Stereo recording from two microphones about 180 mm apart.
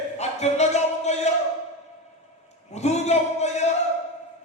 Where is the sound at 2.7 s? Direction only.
40° left (ahead or behind).